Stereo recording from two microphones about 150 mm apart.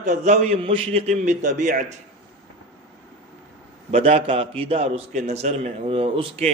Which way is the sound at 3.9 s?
40° right (ahead or behind).